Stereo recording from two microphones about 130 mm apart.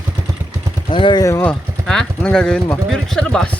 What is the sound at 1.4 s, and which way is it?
Speech, 5° left (ahead or behind).